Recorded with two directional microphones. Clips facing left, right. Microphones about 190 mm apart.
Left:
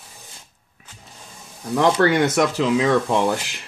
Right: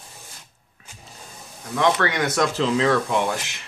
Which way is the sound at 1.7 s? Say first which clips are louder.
Left 4 dB; 30° left (ahead or behind).